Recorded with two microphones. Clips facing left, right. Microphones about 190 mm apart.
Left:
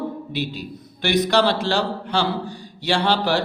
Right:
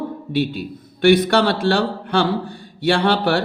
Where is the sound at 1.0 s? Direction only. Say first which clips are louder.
Right 4 dB; 55° right (ahead or behind).